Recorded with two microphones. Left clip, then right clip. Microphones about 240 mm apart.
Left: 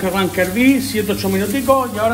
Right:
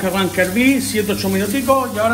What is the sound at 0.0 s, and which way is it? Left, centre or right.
Speech, left.